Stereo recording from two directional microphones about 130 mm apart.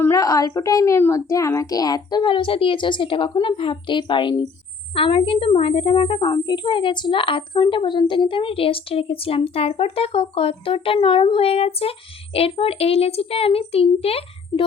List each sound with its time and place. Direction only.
0.0 s a child's voice: 25° left (ahead or behind); by 14.6 s 50° left (ahead or behind)